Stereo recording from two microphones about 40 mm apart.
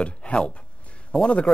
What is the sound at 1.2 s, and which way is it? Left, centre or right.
Speech, left.